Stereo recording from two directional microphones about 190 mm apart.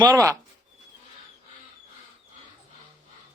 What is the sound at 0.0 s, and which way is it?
Speech, 15° right (ahead or behind).